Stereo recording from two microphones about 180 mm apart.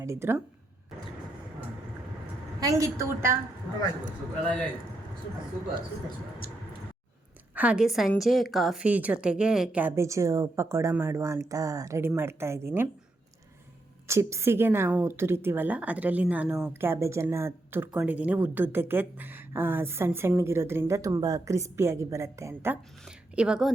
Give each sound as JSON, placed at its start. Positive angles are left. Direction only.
{"t": 0.0, "sound": "a woman's voice", "side_deg": -15}
{"t": 2.6, "sound": "a woman's voice", "side_deg": -20}
{"t": 6.4, "sound": "a sound", "side_deg": 55}
{"t": 7.5, "sound": "a woman's voice", "side_deg": -5}
{"t": 14.1, "sound": "a woman's voice", "side_deg": -15}